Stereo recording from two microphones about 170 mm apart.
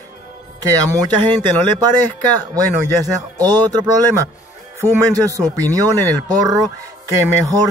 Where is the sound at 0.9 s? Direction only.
25° right (ahead or behind).